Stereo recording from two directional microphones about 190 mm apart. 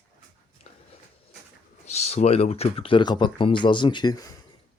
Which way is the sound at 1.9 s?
35° left (ahead or behind).